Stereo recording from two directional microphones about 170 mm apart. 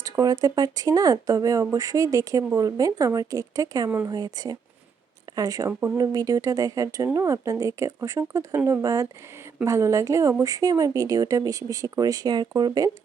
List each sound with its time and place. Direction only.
0.0 s speech: 20° right (ahead or behind)